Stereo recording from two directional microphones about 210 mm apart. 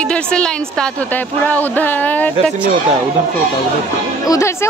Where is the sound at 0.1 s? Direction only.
5° left (ahead or behind).